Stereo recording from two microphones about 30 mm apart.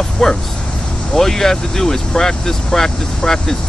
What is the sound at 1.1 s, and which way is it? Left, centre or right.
Speech, centre.